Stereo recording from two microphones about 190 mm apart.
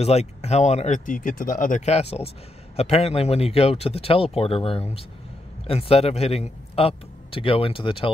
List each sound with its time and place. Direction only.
0.0 s speech: 35° left (ahead or behind)